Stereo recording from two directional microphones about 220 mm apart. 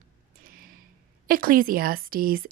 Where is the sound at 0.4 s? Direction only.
40° right (ahead or behind).